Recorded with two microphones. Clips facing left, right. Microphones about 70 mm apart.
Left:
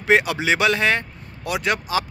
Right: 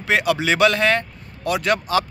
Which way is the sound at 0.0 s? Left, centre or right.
Left.